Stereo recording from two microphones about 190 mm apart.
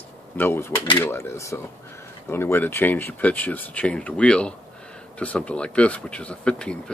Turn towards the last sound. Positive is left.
turn(degrees=5)  # may be behind; listen again after turning